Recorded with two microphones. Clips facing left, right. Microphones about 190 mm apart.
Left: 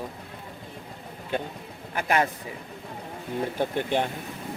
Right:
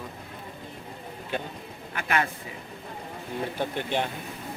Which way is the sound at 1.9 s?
40° left (ahead or behind).